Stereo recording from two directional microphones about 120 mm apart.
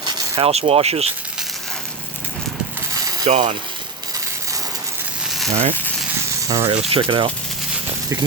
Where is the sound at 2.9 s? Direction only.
30° right (ahead or behind).